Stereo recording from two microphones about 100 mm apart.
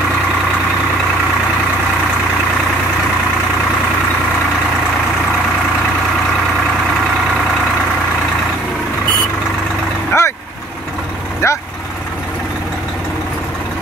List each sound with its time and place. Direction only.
10.1 s vehicle: 25° left (ahead or behind)
11.4 s vehicle: 30° left (ahead or behind)